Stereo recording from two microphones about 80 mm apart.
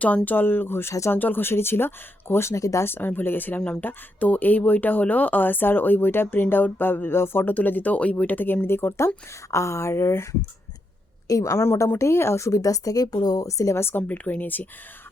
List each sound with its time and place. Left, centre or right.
0.3 s speech: left
1.1 s speech: left
2.8 s a woman's voice: left
11.3 s a woman's voice: left
13.5 s a woman's voice: left
14.1 s speech: left